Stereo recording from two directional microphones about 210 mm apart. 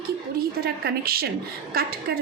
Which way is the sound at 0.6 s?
45° right (ahead or behind).